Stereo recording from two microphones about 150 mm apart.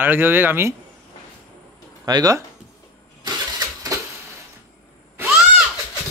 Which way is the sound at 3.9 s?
20° right (ahead or behind).